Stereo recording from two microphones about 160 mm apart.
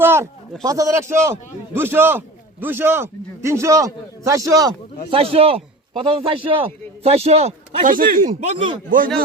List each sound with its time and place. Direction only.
0.0 s a sound: 15° right (ahead or behind)
0.6 s a man's voice: 20° right (ahead or behind)
5.1 s a man's voice: 35° right (ahead or behind)
7.9 s speech: 65° right (ahead or behind)
8.4 s a man's voice: 30° right (ahead or behind)